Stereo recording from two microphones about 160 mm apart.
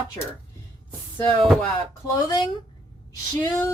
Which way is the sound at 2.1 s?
25° left (ahead or behind).